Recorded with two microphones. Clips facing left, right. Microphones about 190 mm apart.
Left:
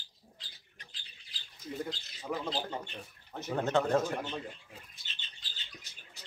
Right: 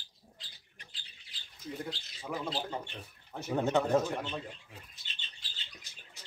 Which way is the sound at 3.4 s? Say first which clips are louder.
Right 1 dB; 15° right (ahead or behind).